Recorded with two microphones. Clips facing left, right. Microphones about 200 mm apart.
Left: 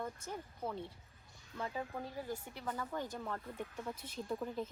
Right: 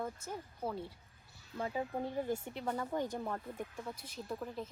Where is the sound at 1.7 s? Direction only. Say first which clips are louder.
Right 5 dB; 20° right (ahead or behind).